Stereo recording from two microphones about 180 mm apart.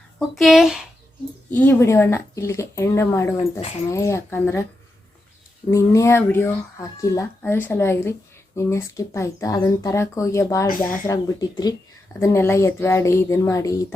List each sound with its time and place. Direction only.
0.2 s speech: centre (ahead or behind)
1.5 s speech: 10° left (ahead or behind)
5.7 s speech: 15° left (ahead or behind)